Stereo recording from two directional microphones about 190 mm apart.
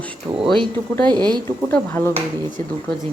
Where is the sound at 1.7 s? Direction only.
10° left (ahead or behind).